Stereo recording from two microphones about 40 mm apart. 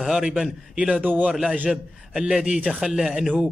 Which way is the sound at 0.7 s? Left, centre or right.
Right.